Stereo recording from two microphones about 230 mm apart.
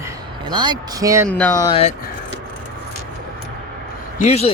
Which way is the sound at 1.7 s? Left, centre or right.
Left.